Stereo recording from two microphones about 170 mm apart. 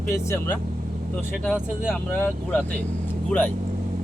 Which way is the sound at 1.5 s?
5° right (ahead or behind).